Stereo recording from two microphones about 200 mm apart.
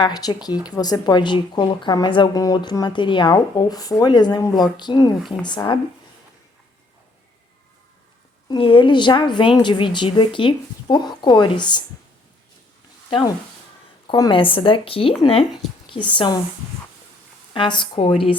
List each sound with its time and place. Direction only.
0.0 s speech: 20° left (ahead or behind)
8.4 s speech: 25° left (ahead or behind)
13.1 s speech: 25° left (ahead or behind)
17.5 s speech: 25° left (ahead or behind)